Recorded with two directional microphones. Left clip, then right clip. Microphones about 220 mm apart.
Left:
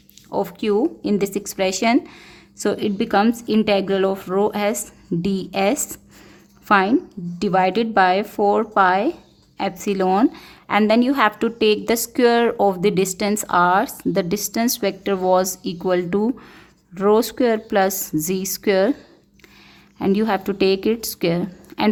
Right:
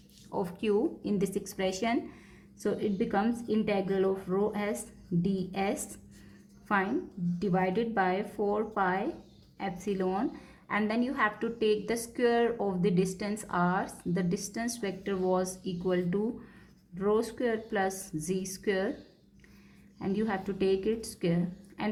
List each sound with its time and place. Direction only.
0.3 s a woman's voice: 35° left (ahead or behind)
20.0 s speech: 45° left (ahead or behind)